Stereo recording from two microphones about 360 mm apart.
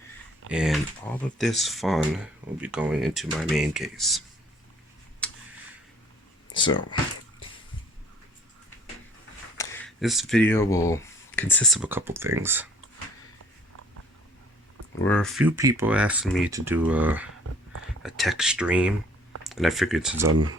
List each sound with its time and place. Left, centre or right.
0.5 s speech: centre
5.2 s tick: centre
6.5 s speech: centre
9.6 s speech: centre
15.0 s speech: centre
20.2 s speech: right